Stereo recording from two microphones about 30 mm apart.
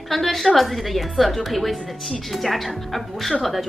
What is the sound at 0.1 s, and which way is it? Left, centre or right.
Speech, centre.